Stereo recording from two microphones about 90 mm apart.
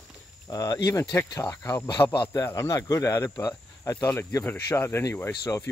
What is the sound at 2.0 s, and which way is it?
Speech, 65° left (ahead or behind).